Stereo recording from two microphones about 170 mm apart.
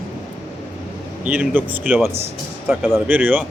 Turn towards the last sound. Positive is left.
turn(degrees=-10)  # may be behind; listen again after turning